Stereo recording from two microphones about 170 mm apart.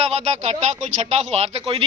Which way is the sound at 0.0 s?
40° right (ahead or behind).